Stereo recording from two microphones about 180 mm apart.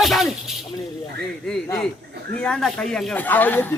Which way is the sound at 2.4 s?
5° left (ahead or behind).